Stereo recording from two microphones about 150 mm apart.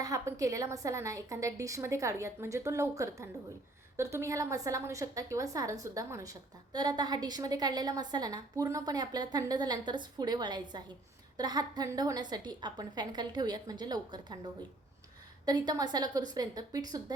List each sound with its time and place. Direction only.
0.0 s a woman's voice: 20° right (ahead or behind)